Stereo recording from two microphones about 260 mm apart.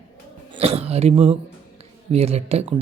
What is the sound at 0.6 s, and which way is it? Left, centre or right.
A man's voice, right.